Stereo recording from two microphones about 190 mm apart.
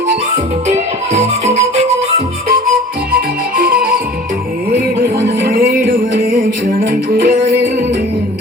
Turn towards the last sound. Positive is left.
turn(degrees=-50)  # may be behind; listen again after turning